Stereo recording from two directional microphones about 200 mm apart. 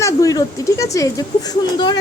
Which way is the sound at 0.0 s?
15° left (ahead or behind).